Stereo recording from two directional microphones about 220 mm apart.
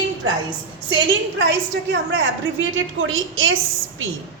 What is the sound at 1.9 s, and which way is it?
A woman's voice, 55° right (ahead or behind).